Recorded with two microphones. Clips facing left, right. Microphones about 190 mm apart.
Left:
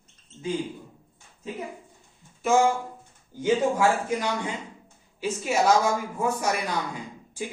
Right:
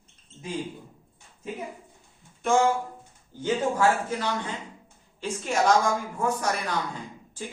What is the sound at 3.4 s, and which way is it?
A woman's voice, 10° left (ahead or behind).